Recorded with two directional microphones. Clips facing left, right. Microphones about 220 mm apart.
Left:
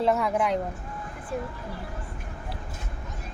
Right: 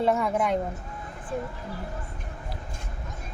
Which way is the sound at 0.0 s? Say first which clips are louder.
Even; centre (ahead or behind).